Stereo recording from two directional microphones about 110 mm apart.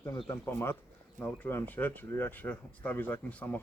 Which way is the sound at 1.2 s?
15° left (ahead or behind).